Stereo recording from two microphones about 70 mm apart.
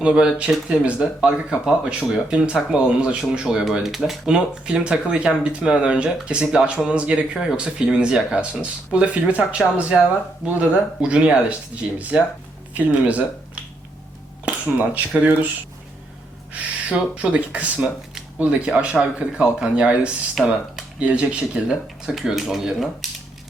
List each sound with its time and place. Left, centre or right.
0.0 s speech: centre
14.4 s speech: right
16.5 s speech: centre